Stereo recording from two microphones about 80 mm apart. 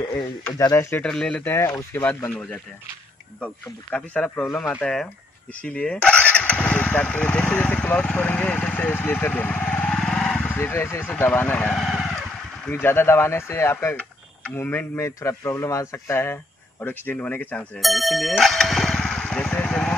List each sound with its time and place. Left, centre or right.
0.7 s speech: left
1.0 s speech: centre
1.4 s speech: left
3.9 s speech: centre
8.9 s vehicle: left
10.5 s speech: left
11.7 s vehicle: centre
12.7 s speech: left
13.9 s mechanisms: centre
14.6 s speech: left
17.7 s speech: centre
18.4 s motorcycle: centre